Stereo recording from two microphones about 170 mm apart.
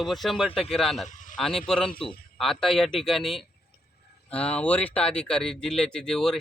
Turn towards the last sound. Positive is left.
turn(degrees=5)  # may be behind; listen again after turning